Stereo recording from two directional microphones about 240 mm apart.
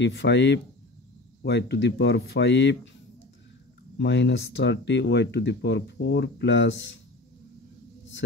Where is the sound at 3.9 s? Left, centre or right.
Left.